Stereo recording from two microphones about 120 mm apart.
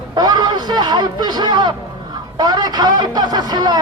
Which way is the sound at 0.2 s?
35° right (ahead or behind).